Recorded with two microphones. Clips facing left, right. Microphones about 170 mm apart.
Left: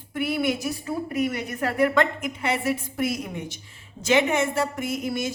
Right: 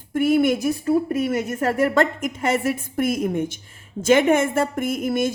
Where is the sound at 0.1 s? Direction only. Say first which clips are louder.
Right 7 dB; 45° right (ahead or behind).